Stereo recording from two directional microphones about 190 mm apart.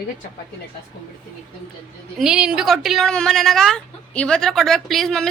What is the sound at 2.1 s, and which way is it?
Speech, 5° right (ahead or behind).